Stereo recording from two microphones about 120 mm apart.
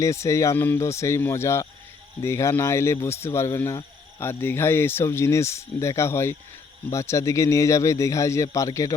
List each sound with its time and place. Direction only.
0.0 s speech: 25° left (ahead or behind)